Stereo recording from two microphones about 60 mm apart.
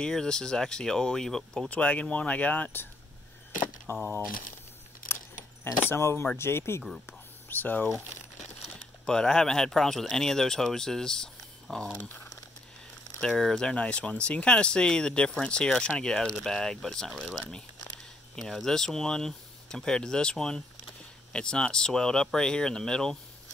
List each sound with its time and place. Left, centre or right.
0.0 s speech: centre
1.7 s speech: left
3.9 s speech: left
5.0 s keys jangling: left
5.9 s speech: left
7.1 s whispering: left
9.0 s speech: centre
13.2 s speech: centre
17.1 s speech: centre
18.4 s speech: centre